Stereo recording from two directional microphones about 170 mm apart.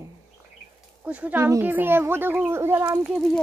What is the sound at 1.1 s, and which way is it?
Speech, 10° right (ahead or behind).